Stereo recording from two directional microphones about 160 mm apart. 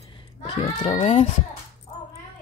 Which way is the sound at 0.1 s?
30° left (ahead or behind).